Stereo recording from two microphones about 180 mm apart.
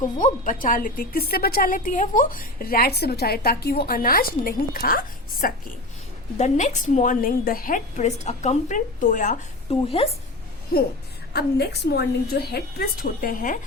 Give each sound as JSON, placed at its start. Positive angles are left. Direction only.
{"t": 0.2, "sound": "a woman's voice", "side_deg": 45}
{"t": 6.3, "sound": "a woman's voice", "side_deg": 40}
{"t": 10.7, "sound": "a woman's voice", "side_deg": 55}